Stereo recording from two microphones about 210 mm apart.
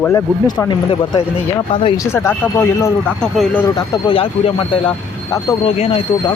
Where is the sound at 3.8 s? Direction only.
25° left (ahead or behind).